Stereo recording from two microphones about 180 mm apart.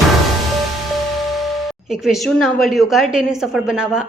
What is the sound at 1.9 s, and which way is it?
A woman's voice, centre (ahead or behind).